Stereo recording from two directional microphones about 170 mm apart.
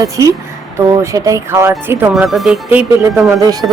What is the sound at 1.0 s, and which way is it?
Speech, 20° right (ahead or behind).